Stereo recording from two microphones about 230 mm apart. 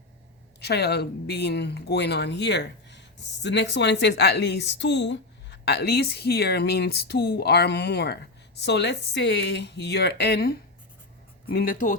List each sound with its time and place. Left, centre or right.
0.6 s a woman's voice: left